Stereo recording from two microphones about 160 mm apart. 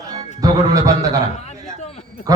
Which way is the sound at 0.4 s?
20° right (ahead or behind).